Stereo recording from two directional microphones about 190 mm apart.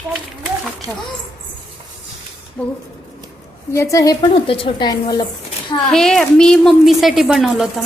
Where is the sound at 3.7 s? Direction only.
15° left (ahead or behind).